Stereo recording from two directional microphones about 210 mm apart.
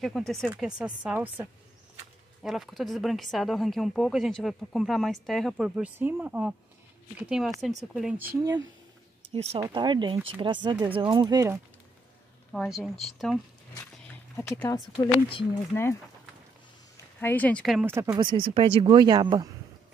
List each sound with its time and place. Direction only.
0.0 s speech: centre (ahead or behind)
9.3 s speech: 30° right (ahead or behind)
12.5 s speech: centre (ahead or behind)
14.3 s speech: 10° left (ahead or behind)
15.7 s speech: 10° left (ahead or behind)
17.8 s speech: 15° right (ahead or behind)